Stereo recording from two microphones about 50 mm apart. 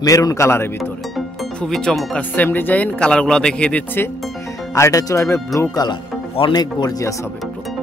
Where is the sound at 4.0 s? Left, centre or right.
Left.